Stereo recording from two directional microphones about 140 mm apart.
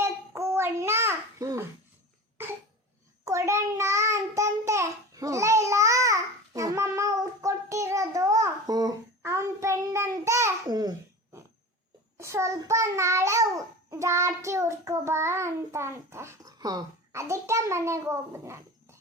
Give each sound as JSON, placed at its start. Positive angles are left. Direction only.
{"t": 0.0, "sound": "child singing", "side_deg": -20}
{"t": 3.2, "sound": "child singing", "side_deg": -20}
{"t": 12.1, "sound": "child singing", "side_deg": -20}